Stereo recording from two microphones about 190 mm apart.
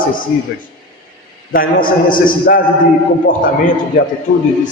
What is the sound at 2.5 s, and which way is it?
Speech, 55° left (ahead or behind).